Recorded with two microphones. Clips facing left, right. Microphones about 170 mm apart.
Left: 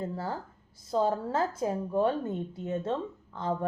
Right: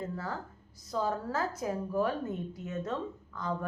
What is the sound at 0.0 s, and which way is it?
A woman's voice, 30° left (ahead or behind).